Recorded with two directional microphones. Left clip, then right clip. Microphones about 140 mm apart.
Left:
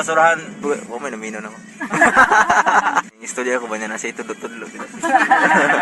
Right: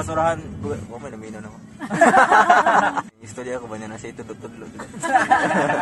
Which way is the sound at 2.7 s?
25° left (ahead or behind).